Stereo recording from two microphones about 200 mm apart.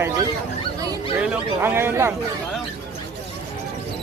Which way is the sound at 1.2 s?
10° right (ahead or behind).